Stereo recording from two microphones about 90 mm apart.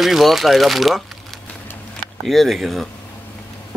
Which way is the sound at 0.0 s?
Centre (ahead or behind).